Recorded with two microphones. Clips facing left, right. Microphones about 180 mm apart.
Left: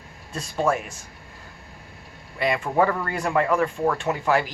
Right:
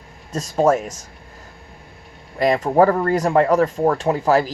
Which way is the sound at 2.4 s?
40° right (ahead or behind).